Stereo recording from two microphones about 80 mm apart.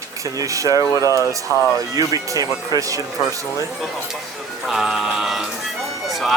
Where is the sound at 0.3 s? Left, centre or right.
Right.